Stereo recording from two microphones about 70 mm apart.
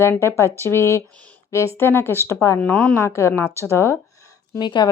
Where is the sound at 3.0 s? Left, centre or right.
Left.